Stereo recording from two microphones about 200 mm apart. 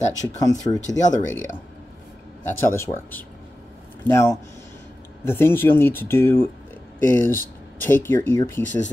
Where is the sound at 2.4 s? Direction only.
10° left (ahead or behind).